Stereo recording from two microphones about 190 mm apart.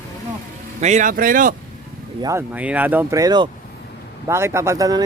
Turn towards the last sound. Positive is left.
turn(degrees=-20)  # may be behind; listen again after turning